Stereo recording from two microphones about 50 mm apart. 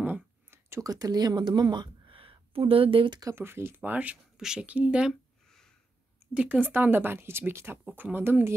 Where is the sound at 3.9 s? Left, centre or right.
Right.